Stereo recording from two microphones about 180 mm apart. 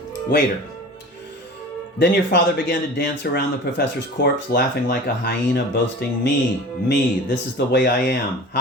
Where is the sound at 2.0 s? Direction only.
65° left (ahead or behind).